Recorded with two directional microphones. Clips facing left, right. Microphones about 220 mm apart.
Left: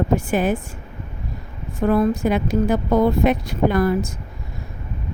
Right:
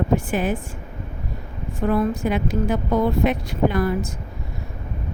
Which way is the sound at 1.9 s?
40° left (ahead or behind).